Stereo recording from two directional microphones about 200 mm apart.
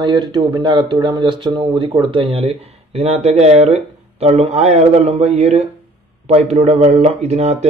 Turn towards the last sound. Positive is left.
turn(degrees=-35)  # may be behind; listen again after turning